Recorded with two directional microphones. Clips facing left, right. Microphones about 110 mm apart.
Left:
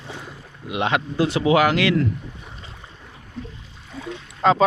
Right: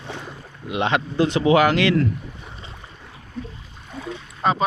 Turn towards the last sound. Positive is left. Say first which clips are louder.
# left 3 dB
turn(degrees=90)